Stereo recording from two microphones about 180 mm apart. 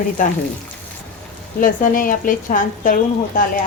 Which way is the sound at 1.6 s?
50° left (ahead or behind).